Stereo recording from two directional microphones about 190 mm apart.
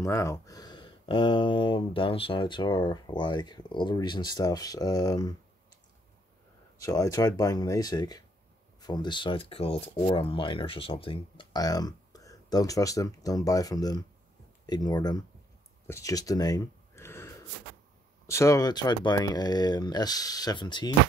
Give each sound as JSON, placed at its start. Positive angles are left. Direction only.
{"t": 0.0, "sound": "speech", "side_deg": 15}
{"t": 6.8, "sound": "speech", "side_deg": 20}
{"t": 15.9, "sound": "a sound", "side_deg": 15}
{"t": 18.2, "sound": "speech", "side_deg": 15}